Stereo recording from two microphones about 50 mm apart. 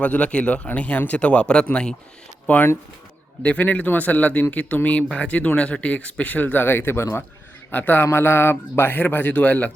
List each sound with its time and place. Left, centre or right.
0.0 s a man's voice: left
7.7 s speech: left
8.0 s speech: left